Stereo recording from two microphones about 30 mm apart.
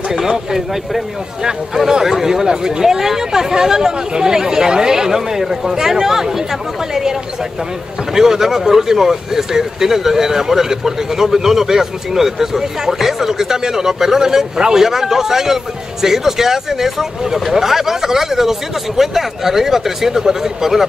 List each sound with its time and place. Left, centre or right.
0.1 s a man's voice: centre
1.8 s a man's voice: centre
8.1 s a man's voice: centre